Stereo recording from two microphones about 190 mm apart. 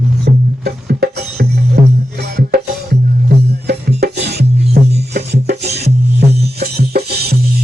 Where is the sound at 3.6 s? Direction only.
60° right (ahead or behind).